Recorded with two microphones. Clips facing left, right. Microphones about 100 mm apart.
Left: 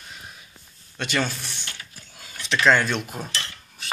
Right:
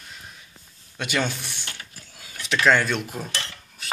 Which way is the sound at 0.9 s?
10° right (ahead or behind).